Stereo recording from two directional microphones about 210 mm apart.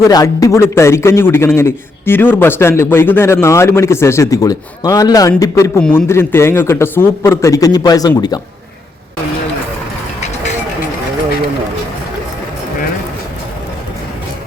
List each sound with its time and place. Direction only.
0.0 s a man's voice: 15° left (ahead or behind)